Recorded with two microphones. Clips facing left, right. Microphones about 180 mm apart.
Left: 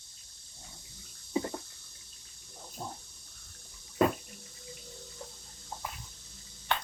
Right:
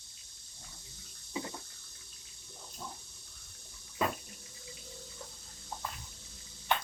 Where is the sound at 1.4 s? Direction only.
40° left (ahead or behind).